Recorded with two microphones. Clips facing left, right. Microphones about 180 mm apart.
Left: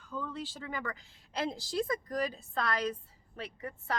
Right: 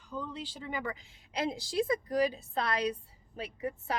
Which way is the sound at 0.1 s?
15° right (ahead or behind).